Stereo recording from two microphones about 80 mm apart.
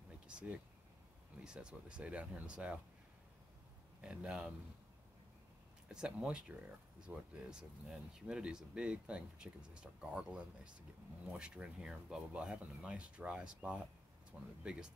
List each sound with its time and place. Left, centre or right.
0.3 s a sound: centre
1.4 s speech: centre
4.0 s speech: centre
5.9 s speech: centre